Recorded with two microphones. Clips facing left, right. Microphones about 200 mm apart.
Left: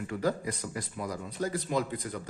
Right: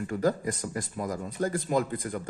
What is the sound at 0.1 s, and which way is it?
Speech, 45° right (ahead or behind).